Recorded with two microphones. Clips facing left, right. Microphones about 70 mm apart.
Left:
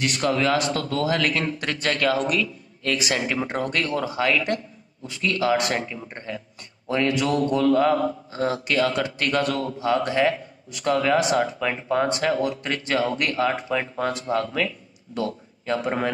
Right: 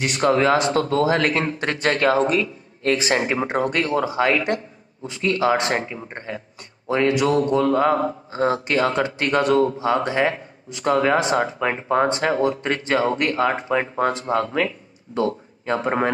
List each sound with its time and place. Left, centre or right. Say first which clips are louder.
0.0 s a man's voice: right 4 dB; right